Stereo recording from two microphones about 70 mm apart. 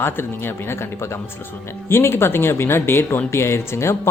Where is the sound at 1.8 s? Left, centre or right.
Left.